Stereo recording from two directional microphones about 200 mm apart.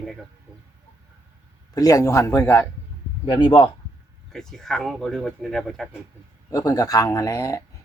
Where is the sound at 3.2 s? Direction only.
25° left (ahead or behind).